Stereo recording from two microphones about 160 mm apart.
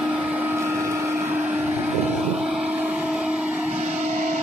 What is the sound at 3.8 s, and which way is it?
Vehicle, 45° right (ahead or behind).